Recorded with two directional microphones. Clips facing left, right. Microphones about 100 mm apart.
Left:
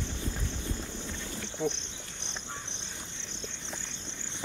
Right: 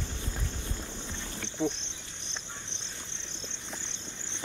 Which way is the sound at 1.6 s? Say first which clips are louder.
Right 1 dB; 20° right (ahead or behind).